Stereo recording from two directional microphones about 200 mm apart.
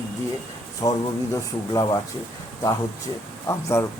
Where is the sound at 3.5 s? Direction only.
15° left (ahead or behind).